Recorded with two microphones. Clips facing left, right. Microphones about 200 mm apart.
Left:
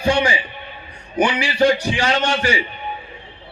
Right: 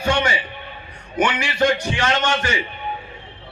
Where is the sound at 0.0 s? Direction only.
30° left (ahead or behind).